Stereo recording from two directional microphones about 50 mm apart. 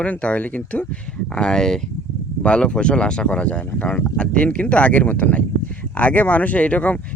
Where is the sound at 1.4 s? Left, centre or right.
Centre.